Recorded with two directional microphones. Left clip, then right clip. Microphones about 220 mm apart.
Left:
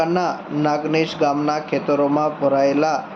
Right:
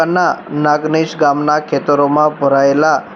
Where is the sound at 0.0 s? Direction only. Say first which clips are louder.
Right 7 dB; 20° right (ahead or behind).